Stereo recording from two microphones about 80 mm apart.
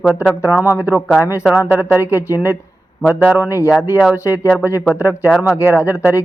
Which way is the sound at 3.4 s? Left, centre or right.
Left.